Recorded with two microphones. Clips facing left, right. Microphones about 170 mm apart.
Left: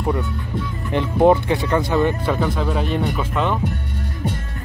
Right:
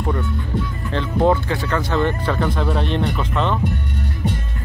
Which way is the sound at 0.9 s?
15° left (ahead or behind).